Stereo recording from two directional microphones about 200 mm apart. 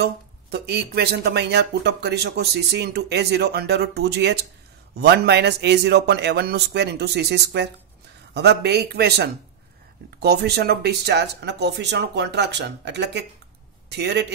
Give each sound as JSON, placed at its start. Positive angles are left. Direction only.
{"t": 0.0, "sound": "a man's voice", "side_deg": -55}